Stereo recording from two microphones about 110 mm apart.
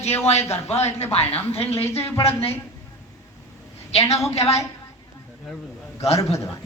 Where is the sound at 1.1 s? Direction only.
65° left (ahead or behind).